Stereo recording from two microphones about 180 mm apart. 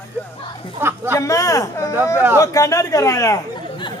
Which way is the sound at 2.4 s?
15° left (ahead or behind).